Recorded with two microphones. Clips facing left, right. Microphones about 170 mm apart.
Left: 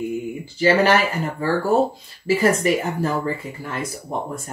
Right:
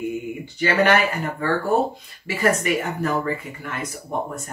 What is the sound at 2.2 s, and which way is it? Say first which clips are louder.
Speech: left 3 dB; 30° left (ahead or behind).